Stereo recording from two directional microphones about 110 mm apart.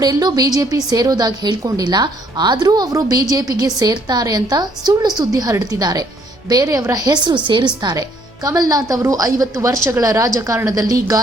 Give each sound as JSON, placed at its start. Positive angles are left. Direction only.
{"t": 0.0, "sound": "a woman's voice", "side_deg": -40}
{"t": 8.4, "sound": "a woman's voice", "side_deg": -35}